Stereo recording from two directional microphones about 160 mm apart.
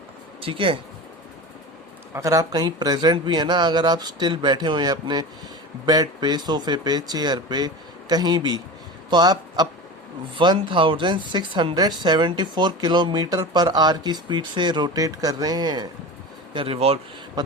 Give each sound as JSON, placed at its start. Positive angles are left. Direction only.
{"t": 0.4, "sound": "speech", "side_deg": -35}
{"t": 2.1, "sound": "a man's voice", "side_deg": -20}
{"t": 16.6, "sound": "speech", "side_deg": -35}